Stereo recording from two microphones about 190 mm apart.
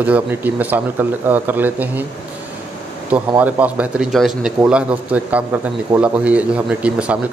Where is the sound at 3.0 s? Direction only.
10° right (ahead or behind).